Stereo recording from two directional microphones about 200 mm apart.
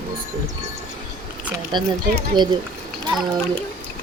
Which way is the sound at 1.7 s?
20° right (ahead or behind).